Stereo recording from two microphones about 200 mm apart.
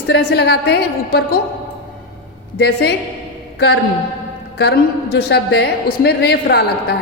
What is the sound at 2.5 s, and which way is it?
A woman's voice, 55° left (ahead or behind).